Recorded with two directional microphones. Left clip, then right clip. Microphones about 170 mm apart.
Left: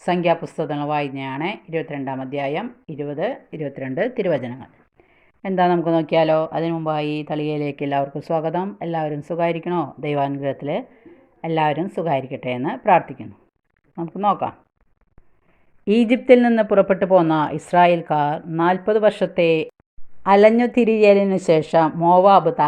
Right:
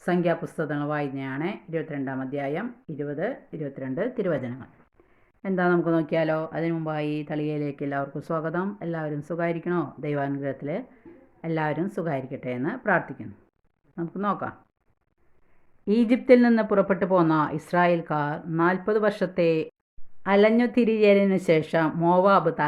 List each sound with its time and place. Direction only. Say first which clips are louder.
0.0 s a woman's voice: left 6 dB; 5° left (ahead or behind)
14.2 s a woman's voice: left 9 dB; 5° left (ahead or behind)
15.8 s speech: left 6 dB; 15° left (ahead or behind)
16.0 s a woman's voice: left 4 dB; 5° left (ahead or behind)
20.2 s a woman's voice: left 7 dB; 15° left (ahead or behind)